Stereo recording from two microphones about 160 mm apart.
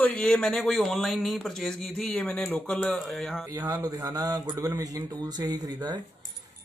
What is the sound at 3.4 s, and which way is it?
Speech, 25° right (ahead or behind).